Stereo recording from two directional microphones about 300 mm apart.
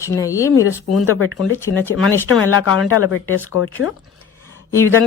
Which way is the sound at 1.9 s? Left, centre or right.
Left.